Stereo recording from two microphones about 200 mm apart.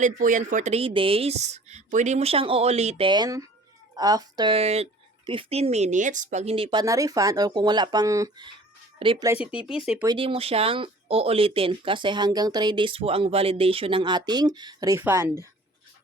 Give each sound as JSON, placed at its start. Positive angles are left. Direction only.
{"t": 0.0, "sound": "speech", "side_deg": -40}
{"t": 9.3, "sound": "speech", "side_deg": -5}
{"t": 10.0, "sound": "speech", "side_deg": -20}